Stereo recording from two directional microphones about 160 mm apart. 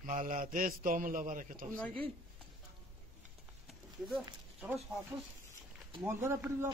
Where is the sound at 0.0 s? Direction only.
55° right (ahead or behind).